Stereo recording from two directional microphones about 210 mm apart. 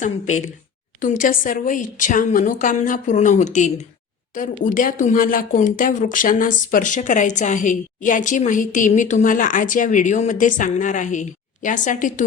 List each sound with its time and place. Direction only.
0.9 s speech: 40° left (ahead or behind)